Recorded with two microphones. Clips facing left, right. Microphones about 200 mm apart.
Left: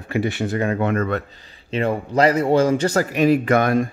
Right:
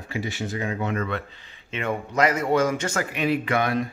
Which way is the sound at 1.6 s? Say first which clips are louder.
Left 6 dB; 35° left (ahead or behind).